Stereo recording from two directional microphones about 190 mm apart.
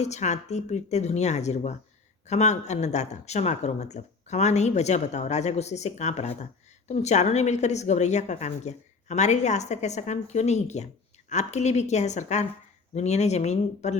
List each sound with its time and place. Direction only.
0.0 s speech: 35° left (ahead or behind)